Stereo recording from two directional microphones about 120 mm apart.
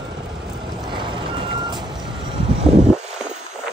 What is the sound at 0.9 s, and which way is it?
Vehicle, 45° right (ahead or behind).